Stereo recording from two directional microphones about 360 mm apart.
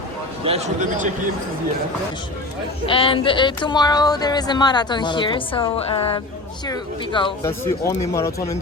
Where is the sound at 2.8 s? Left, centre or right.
Centre.